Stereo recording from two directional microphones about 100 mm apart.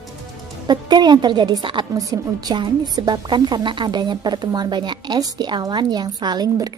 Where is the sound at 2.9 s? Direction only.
45° right (ahead or behind).